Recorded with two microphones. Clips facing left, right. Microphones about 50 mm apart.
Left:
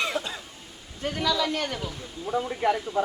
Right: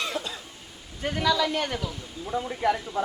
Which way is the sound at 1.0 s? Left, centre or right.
Centre.